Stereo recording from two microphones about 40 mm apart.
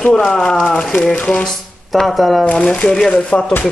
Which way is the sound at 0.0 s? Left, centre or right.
Centre.